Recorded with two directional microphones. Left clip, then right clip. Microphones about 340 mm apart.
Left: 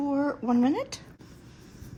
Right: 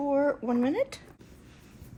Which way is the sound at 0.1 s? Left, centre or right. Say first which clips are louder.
Right 4 dB; centre.